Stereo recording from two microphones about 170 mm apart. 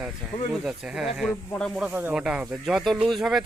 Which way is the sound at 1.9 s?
10° right (ahead or behind).